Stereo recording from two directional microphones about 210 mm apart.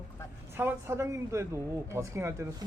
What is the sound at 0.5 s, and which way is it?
Speech, 10° right (ahead or behind).